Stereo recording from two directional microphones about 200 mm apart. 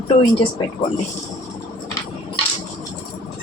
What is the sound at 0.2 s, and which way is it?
Speech, 25° left (ahead or behind).